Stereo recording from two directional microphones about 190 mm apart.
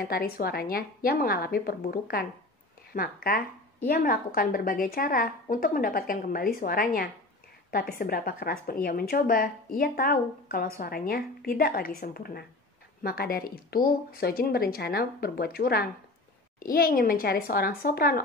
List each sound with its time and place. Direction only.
0.0 s a woman's voice: 50° left (ahead or behind)